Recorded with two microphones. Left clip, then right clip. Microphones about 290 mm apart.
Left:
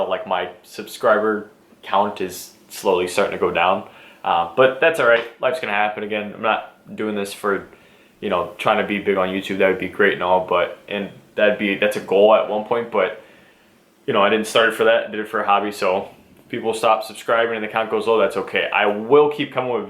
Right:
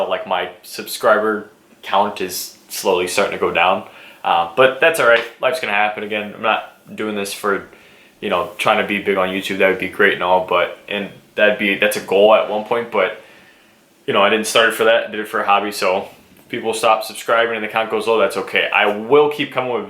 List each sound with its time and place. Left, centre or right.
0.1 s speech: centre